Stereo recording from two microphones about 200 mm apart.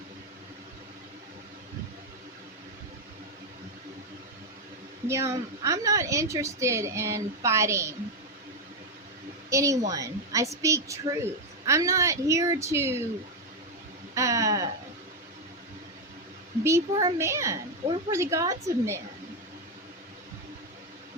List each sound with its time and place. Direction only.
5.0 s a woman's voice: 15° right (ahead or behind)
9.5 s a woman's voice: 15° right (ahead or behind)
14.2 s a sound: 15° right (ahead or behind)
16.6 s a woman's voice: 15° right (ahead or behind)